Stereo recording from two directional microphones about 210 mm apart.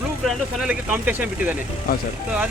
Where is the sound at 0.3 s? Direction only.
5° right (ahead or behind).